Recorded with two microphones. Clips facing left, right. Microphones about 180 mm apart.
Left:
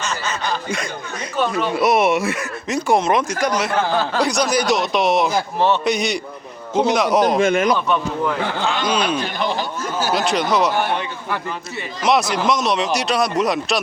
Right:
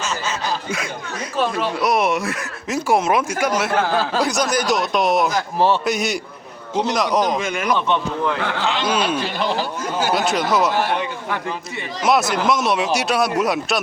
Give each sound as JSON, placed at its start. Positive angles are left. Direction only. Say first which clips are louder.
{"t": 0.0, "sound": "a sound", "louder": "even", "side_deg": -5}
{"t": 1.5, "sound": "speech", "louder": "left 5 dB", "side_deg": 0}
{"t": 7.3, "sound": "speech", "louder": "left 5 dB", "side_deg": 45}
{"t": 8.8, "sound": "speech", "louder": "even", "side_deg": -5}